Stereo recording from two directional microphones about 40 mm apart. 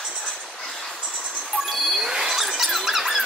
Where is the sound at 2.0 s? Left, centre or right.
Centre.